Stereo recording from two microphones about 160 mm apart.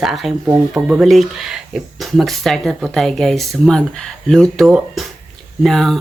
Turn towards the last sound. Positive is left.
turn(degrees=0)  # may be behind; listen again after turning